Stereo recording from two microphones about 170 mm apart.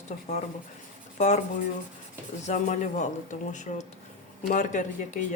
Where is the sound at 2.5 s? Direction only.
45° left (ahead or behind).